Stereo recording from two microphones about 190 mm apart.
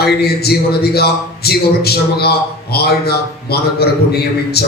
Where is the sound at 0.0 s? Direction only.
55° left (ahead or behind).